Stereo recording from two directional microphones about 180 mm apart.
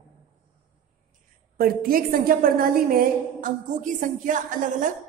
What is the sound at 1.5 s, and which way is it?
A woman's voice, 55° right (ahead or behind).